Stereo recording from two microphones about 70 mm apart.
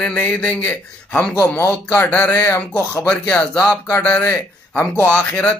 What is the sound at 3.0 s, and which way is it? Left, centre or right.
Speech, centre.